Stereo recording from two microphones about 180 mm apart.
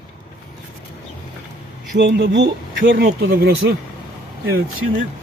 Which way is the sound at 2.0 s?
70° right (ahead or behind).